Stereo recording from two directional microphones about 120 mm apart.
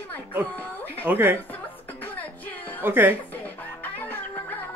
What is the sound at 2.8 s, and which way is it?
Speech, 15° right (ahead or behind).